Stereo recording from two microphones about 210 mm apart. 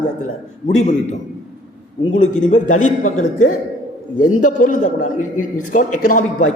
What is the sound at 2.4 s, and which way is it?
A man's voice, 35° left (ahead or behind).